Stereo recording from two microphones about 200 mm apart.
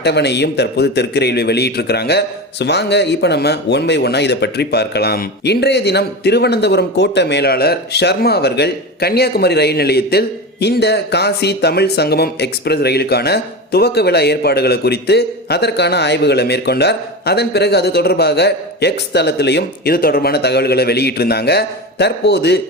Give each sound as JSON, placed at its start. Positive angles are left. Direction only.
{"t": 0.0, "sound": "speech", "side_deg": 55}